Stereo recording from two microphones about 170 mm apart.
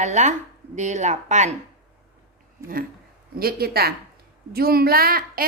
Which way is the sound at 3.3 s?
65° right (ahead or behind).